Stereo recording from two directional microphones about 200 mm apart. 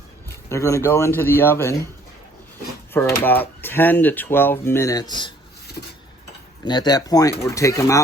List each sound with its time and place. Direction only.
0.4 s speech: 15° left (ahead or behind)
2.9 s speech: 10° left (ahead or behind)
6.7 s speech: 20° left (ahead or behind)